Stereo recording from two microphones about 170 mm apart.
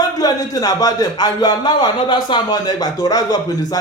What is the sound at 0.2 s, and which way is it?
A man's voice, 20° left (ahead or behind).